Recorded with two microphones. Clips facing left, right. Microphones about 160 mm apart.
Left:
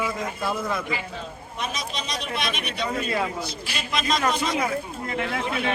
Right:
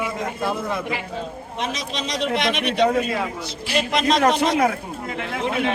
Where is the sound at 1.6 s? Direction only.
90° right.